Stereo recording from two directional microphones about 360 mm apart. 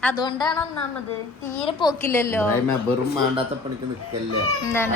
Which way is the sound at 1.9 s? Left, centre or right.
Centre.